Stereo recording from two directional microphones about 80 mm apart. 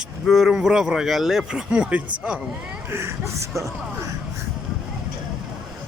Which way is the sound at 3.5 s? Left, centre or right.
Right.